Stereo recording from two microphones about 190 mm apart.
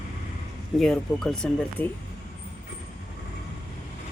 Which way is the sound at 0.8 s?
5° left (ahead or behind).